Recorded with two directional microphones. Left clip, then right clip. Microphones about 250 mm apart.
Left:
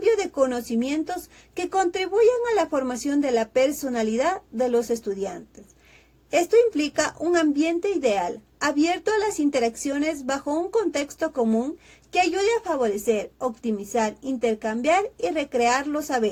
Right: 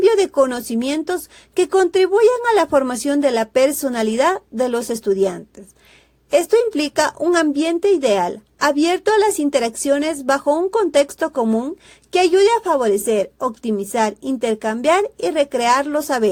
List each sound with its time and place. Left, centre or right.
0.0 s speech: right